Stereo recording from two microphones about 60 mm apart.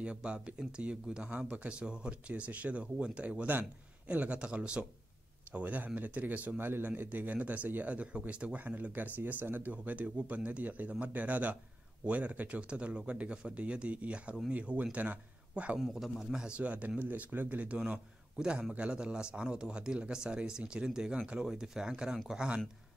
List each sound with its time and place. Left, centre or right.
0.0 s speech: centre
5.5 s speech: right
6.6 s a man's voice: right
15.8 s a man's voice: centre